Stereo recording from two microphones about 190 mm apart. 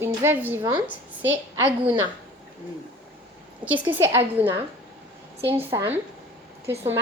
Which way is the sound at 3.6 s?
10° right (ahead or behind).